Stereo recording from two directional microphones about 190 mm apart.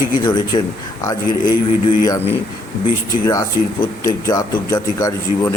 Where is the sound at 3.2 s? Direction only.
15° left (ahead or behind).